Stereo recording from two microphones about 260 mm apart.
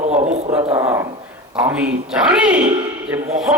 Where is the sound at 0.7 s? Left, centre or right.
Centre.